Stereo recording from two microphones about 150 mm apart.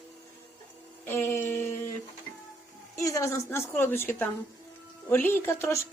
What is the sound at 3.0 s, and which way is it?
A woman's voice, 20° left (ahead or behind).